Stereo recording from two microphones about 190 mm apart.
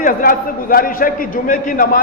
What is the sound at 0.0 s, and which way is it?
A man's voice, 50° left (ahead or behind).